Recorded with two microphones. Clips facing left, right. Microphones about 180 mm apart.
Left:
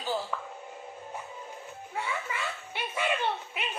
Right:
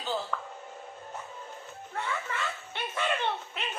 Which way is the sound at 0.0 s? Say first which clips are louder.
Left 1 dB; 10° left (ahead or behind).